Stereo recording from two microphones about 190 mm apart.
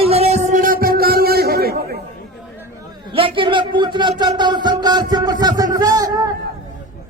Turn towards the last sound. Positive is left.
turn(degrees=-20)  # may be behind; listen again after turning